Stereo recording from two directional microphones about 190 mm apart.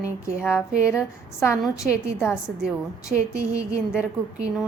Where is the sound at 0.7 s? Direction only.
5° right (ahead or behind).